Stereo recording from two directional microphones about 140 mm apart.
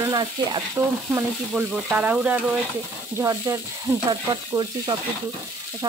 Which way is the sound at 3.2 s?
20° right (ahead or behind).